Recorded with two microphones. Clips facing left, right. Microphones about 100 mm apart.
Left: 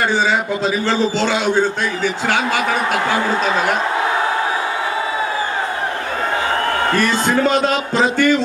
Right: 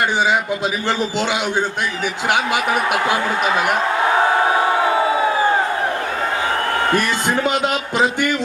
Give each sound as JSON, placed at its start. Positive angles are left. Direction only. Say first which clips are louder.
{"t": 0.9, "sound": "a man's voice", "louder": "left 2 dB", "side_deg": -15}
{"t": 2.9, "sound": "a man's voice", "louder": "left 1 dB", "side_deg": -15}
{"t": 6.9, "sound": "a man's voice", "louder": "left 2 dB", "side_deg": -15}